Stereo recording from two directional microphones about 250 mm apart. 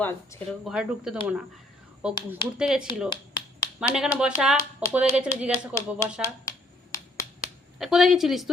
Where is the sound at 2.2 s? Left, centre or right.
Centre.